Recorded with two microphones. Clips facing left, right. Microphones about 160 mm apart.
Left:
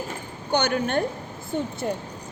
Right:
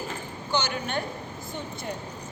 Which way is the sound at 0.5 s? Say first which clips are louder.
Left 6 dB; 55° left (ahead or behind).